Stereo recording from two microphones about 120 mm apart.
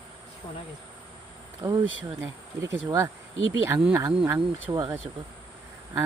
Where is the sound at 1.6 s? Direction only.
20° right (ahead or behind).